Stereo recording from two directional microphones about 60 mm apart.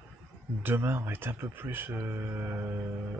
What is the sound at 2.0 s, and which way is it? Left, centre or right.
Mantra, right.